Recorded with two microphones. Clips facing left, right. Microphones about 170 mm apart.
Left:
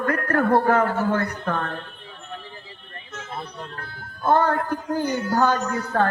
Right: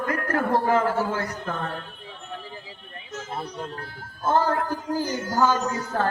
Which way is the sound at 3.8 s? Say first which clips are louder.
Even; 65° left (ahead or behind).